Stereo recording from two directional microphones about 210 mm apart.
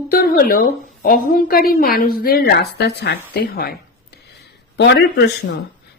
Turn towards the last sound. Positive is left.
turn(degrees=55)  # may be behind; listen again after turning